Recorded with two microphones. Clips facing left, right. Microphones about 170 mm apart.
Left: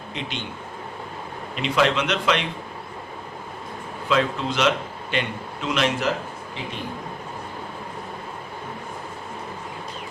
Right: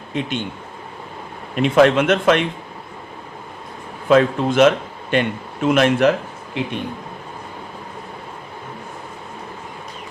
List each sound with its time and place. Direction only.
0.1 s a man's voice: 50° right (ahead or behind)
1.5 s a man's voice: 50° right (ahead or behind)
4.1 s a man's voice: 50° right (ahead or behind)
6.6 s a man's voice: 65° right (ahead or behind)